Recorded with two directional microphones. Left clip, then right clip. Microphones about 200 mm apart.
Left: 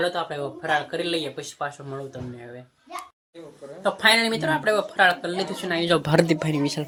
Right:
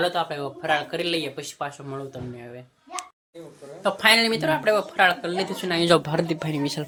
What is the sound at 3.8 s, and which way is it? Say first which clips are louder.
Speech: right 1 dB; centre (ahead or behind).